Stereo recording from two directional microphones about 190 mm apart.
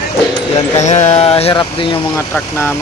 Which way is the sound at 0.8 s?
35° left (ahead or behind).